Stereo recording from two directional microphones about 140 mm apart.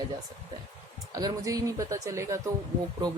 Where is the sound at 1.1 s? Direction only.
25° right (ahead or behind).